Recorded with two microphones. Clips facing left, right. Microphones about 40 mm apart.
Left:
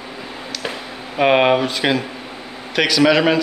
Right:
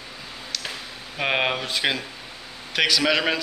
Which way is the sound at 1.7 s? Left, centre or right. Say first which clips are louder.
Left 6 dB; centre.